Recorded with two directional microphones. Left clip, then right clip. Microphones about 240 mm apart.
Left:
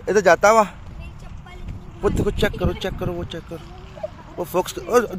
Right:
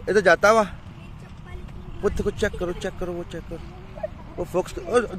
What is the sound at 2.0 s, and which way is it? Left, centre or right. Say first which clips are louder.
Speech: left 3 dB; centre.